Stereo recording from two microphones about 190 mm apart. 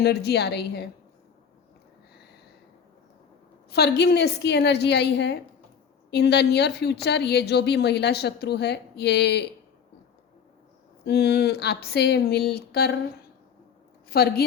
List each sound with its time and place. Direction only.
0.0 s speech: 55° left (ahead or behind)
3.7 s speech: 60° left (ahead or behind)
11.0 s speech: 60° left (ahead or behind)
14.1 s speech: 55° left (ahead or behind)